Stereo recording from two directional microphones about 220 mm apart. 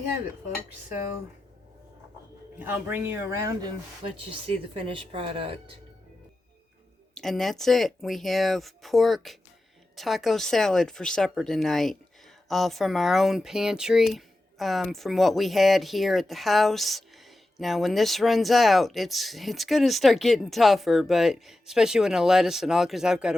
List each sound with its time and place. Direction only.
2.6 s speech: 10° right (ahead or behind); by 5.7 s 25° right (ahead or behind)
7.1 s speech: centre (ahead or behind)